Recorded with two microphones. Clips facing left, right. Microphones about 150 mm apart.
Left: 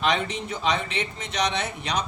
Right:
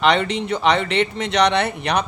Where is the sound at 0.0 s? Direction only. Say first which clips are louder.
Right 7 dB; 70° right (ahead or behind).